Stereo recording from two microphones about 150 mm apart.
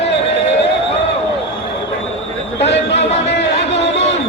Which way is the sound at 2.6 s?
45° left (ahead or behind).